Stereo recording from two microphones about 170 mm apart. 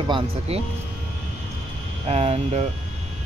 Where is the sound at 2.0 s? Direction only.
40° right (ahead or behind).